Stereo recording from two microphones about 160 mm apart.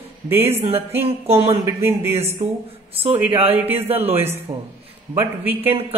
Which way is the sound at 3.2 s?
10° right (ahead or behind).